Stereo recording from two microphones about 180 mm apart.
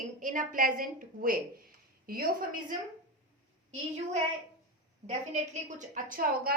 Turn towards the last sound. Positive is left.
turn(degrees=-50)  # may be behind; listen again after turning